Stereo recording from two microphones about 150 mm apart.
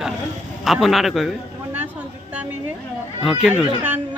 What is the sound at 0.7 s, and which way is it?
Speech, centre (ahead or behind).